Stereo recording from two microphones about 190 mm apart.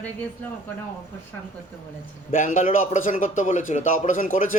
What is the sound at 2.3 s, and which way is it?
A man's voice, 45° left (ahead or behind).